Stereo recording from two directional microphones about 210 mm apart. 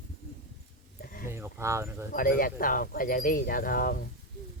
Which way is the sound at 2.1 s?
40° left (ahead or behind).